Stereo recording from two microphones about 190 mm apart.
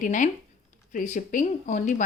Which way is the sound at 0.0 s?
45° left (ahead or behind).